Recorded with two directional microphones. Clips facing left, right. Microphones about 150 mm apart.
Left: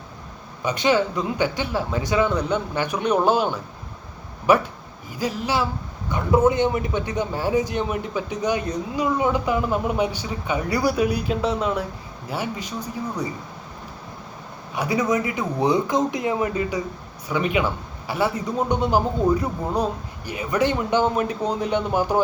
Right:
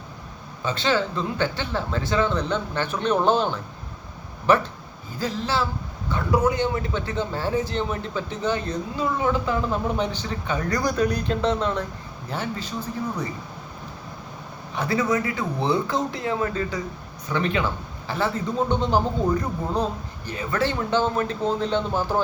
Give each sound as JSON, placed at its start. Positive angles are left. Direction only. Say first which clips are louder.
{"t": 0.6, "sound": "a man's voice", "louder": "left 3 dB", "side_deg": 15}
{"t": 14.8, "sound": "a man's voice", "louder": "left 1 dB", "side_deg": 15}